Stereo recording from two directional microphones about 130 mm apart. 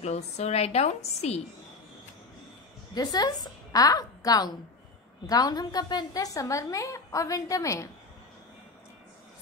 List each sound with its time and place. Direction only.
0.0 s a woman's voice: 55° left (ahead or behind)
2.9 s a woman's voice: 30° left (ahead or behind)